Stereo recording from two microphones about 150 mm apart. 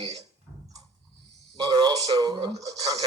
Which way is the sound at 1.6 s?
30° right (ahead or behind).